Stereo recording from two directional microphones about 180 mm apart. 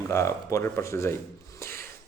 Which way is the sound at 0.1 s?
15° left (ahead or behind).